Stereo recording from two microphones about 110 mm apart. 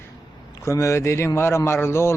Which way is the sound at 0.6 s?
25° left (ahead or behind).